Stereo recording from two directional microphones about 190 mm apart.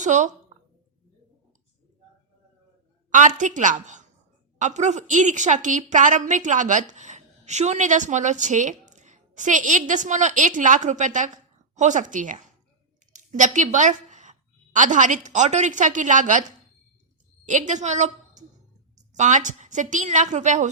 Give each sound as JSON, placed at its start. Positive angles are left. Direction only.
{"t": 0.0, "sound": "a woman's voice", "side_deg": -40}
{"t": 3.1, "sound": "a woman's voice", "side_deg": -40}
{"t": 17.4, "sound": "a woman's voice", "side_deg": -40}